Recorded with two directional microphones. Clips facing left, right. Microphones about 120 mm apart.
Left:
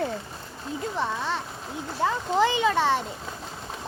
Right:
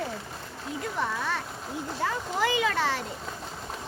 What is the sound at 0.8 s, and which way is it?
A child's voice, 25° left (ahead or behind).